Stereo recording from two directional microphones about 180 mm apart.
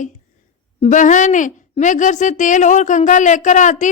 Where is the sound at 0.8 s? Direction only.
45° left (ahead or behind).